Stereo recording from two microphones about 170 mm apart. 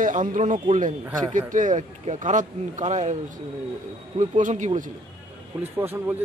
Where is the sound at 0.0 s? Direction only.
50° right (ahead or behind).